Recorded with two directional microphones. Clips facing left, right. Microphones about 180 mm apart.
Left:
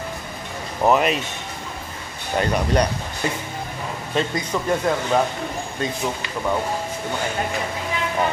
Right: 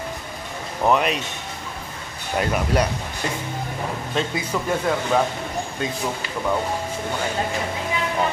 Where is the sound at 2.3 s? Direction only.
5° right (ahead or behind).